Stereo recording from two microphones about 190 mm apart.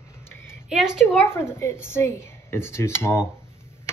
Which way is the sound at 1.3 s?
15° left (ahead or behind).